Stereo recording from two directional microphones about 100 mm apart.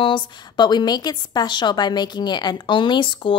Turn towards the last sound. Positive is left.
turn(degrees=55)  # may be behind; listen again after turning